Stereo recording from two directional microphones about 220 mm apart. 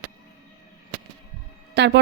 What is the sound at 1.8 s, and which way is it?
Speech, 50° right (ahead or behind).